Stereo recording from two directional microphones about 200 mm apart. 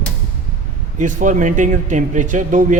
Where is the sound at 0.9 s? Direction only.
40° right (ahead or behind).